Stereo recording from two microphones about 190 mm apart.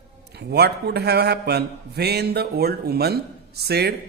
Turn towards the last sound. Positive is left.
turn(degrees=-60)  # may be behind; listen again after turning